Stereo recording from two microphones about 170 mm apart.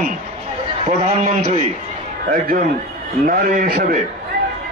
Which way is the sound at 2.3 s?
60° right (ahead or behind).